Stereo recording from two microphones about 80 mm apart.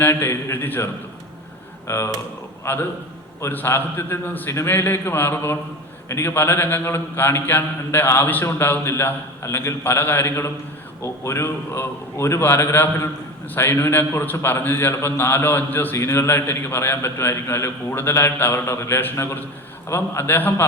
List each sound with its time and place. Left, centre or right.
0.0 s a man's voice: left
1.9 s a man's voice: left